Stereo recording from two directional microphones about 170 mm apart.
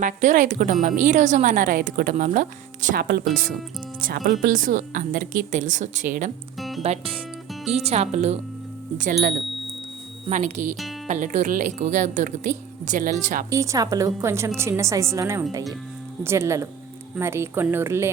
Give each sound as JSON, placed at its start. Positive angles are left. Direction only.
{"t": 0.0, "sound": "a woman's voice", "side_deg": -50}
{"t": 6.6, "sound": "music", "side_deg": 0}
{"t": 6.8, "sound": "speech", "side_deg": -35}
{"t": 9.0, "sound": "a woman's voice", "side_deg": -50}
{"t": 13.5, "sound": "a woman's voice", "side_deg": -20}